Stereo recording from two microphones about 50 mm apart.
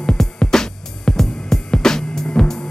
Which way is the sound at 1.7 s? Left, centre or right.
Centre.